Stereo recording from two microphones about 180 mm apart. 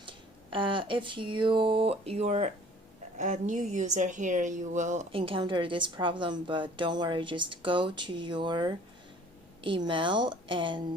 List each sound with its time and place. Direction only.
0.5 s a woman's voice: 25° right (ahead or behind)
5.1 s a woman's voice: 30° right (ahead or behind)